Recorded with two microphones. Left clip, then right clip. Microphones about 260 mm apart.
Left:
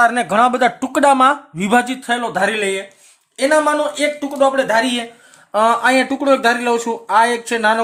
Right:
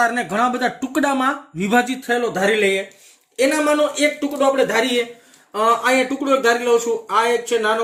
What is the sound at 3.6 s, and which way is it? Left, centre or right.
Speech, left.